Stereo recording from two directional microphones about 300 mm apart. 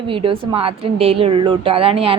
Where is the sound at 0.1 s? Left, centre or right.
Centre.